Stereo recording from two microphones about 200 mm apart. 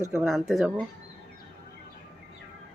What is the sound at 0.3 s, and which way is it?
Speech, centre (ahead or behind).